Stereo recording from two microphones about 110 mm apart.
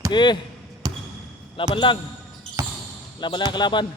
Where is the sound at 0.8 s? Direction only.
35° right (ahead or behind).